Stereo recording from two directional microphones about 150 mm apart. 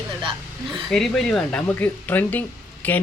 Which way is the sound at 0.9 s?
5° left (ahead or behind).